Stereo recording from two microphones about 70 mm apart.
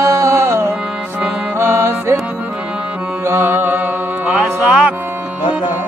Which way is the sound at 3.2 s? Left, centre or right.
Right.